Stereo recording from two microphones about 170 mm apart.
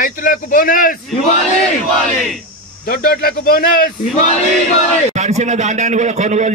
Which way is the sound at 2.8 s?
60° left (ahead or behind).